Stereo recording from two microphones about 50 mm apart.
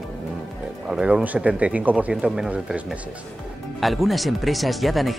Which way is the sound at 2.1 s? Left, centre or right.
Centre.